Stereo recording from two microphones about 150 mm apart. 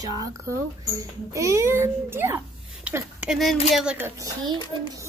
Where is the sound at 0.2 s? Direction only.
20° right (ahead or behind).